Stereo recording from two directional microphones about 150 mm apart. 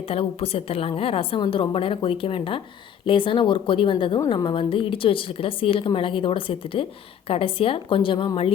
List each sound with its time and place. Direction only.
0.1 s a woman's voice: 40° left (ahead or behind)